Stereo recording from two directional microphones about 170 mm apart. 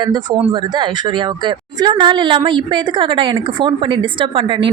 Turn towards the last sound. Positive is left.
turn(degrees=-30)  # may be behind; listen again after turning